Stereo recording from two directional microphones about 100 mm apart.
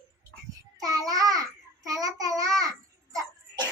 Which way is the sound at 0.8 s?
35° right (ahead or behind).